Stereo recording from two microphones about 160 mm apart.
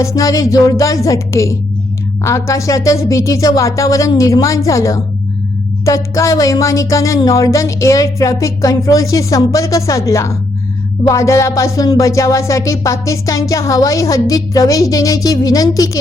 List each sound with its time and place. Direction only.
0.0 s music: 20° left (ahead or behind)